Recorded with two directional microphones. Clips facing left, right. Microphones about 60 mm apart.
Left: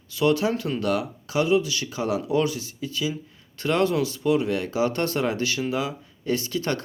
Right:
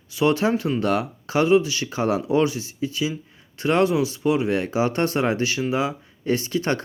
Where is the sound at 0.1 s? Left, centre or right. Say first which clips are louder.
Right 2 dB; right.